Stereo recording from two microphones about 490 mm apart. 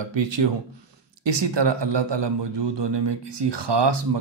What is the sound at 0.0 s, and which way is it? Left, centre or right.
A man's voice, right.